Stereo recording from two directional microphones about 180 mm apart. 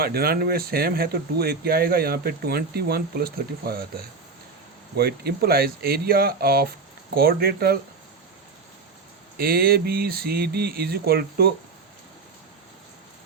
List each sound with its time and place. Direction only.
0.0 s speech: 60° right (ahead or behind)
9.4 s speech: 55° right (ahead or behind)